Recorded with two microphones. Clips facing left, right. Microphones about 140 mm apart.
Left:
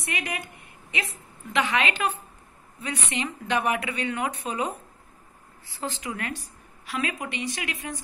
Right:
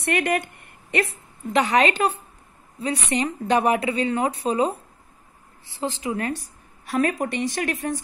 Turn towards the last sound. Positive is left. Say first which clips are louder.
# right 8 dB
turn(degrees=-45)  # may be behind; listen again after turning